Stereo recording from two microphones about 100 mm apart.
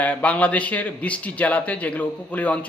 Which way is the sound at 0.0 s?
15° left (ahead or behind).